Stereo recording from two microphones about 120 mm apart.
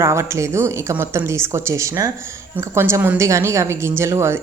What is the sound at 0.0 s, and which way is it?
A woman's voice, 25° right (ahead or behind).